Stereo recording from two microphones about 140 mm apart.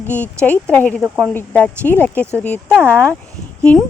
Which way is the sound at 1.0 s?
10° right (ahead or behind).